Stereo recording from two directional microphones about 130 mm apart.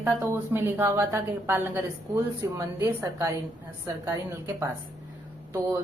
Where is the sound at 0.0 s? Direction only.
20° right (ahead or behind).